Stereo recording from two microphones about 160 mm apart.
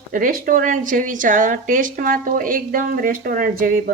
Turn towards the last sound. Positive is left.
turn(degrees=-60)  # may be behind; listen again after turning